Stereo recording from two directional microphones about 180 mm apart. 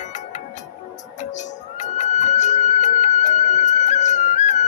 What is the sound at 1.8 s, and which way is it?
Music, 40° left (ahead or behind).